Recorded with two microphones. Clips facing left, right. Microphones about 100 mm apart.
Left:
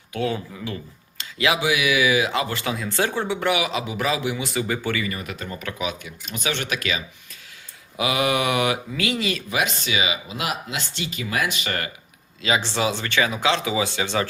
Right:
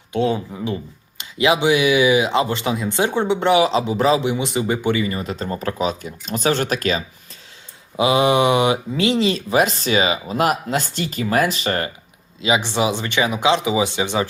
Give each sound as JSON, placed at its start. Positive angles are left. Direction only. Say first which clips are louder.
{"t": 0.1, "sound": "speech", "louder": "right 6 dB", "side_deg": -25}
{"t": 7.9, "sound": "speech", "louder": "right 6 dB", "side_deg": -25}
{"t": 12.4, "sound": "speech", "louder": "right 4 dB", "side_deg": -15}